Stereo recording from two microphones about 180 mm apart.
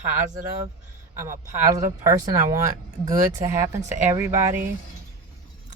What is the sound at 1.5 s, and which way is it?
Speech, 20° right (ahead or behind).